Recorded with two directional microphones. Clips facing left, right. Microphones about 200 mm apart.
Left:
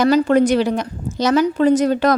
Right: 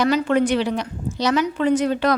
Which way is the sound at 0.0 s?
40° left (ahead or behind).